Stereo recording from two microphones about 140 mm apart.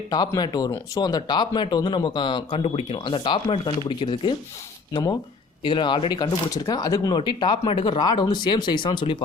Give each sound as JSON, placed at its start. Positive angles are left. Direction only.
{"t": 0.1, "sound": "speech", "side_deg": 30}
{"t": 5.6, "sound": "speech", "side_deg": 35}